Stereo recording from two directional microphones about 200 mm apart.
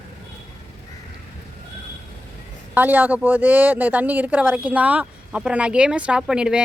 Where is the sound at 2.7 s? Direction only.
10° right (ahead or behind).